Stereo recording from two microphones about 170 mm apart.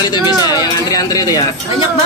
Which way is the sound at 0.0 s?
25° left (ahead or behind).